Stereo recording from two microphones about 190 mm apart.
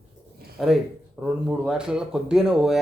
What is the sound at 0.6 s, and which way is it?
Speech, centre (ahead or behind).